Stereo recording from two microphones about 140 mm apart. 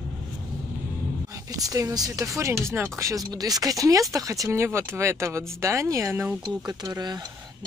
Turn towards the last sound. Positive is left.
turn(degrees=-30)  # may be behind; listen again after turning